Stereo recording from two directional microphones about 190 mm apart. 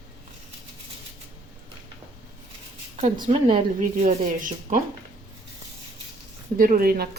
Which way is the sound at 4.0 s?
40° right (ahead or behind).